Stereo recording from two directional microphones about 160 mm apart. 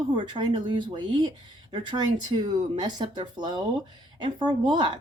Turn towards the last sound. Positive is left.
turn(degrees=-30)  # may be behind; listen again after turning